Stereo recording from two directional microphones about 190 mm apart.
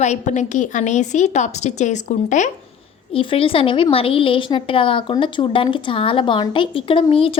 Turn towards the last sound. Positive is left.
turn(degrees=30)  # may be behind; listen again after turning